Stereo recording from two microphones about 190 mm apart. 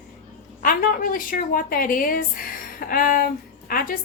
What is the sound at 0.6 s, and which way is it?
A woman's voice, 50° left (ahead or behind).